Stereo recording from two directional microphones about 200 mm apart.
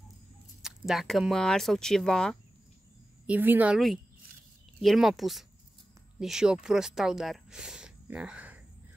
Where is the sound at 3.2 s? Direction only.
10° right (ahead or behind).